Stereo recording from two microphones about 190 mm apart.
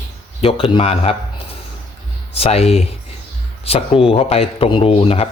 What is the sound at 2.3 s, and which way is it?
Speech, 30° left (ahead or behind).